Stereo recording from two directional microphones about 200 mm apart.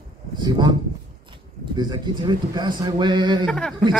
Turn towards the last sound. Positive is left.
turn(degrees=5)  # may be behind; listen again after turning